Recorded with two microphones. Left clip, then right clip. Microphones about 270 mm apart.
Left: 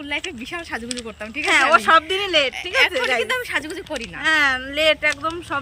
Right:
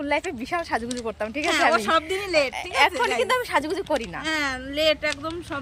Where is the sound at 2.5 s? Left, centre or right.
Centre.